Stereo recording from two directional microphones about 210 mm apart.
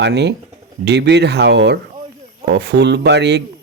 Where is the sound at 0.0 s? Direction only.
55° right (ahead or behind).